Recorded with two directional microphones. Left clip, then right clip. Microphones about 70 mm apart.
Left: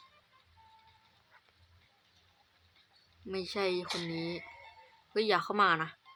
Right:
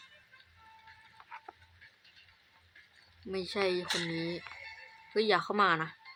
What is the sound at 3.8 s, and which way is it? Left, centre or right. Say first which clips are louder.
Speech: right 4 dB; right.